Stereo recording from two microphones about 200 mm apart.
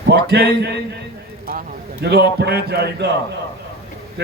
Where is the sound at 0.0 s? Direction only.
50° right (ahead or behind).